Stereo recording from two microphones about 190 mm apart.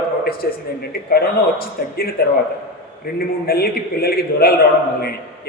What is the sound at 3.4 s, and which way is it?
A man's voice, 55° left (ahead or behind).